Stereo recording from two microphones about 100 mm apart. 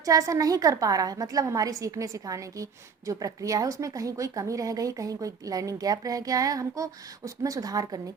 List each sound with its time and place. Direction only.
0.0 s a woman's voice: 35° right (ahead or behind)